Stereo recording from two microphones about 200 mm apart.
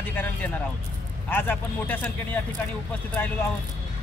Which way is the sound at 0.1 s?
10° left (ahead or behind).